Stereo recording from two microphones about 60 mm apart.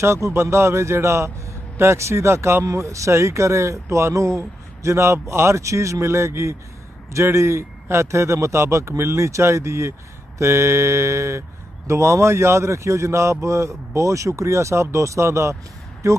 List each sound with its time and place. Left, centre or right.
0.0 s speech: right